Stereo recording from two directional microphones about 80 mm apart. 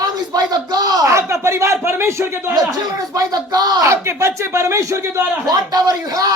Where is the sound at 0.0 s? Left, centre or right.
Right.